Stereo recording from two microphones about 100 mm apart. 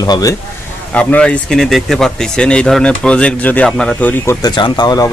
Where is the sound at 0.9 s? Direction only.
10° left (ahead or behind).